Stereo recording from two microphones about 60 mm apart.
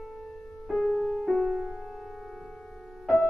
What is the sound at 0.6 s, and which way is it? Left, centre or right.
Music, centre.